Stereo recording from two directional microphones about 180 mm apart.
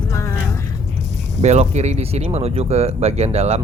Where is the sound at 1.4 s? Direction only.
40° right (ahead or behind).